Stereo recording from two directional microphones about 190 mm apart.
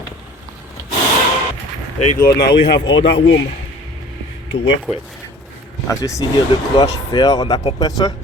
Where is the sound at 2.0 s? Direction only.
50° left (ahead or behind).